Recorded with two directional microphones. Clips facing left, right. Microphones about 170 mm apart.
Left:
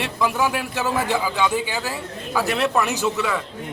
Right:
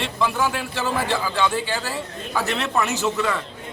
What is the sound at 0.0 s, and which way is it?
A man's voice, 10° left (ahead or behind).